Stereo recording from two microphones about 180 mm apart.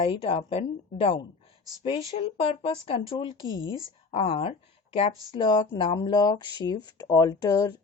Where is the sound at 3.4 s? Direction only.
90° left.